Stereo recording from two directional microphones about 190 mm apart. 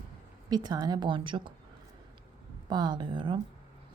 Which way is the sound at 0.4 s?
20° right (ahead or behind).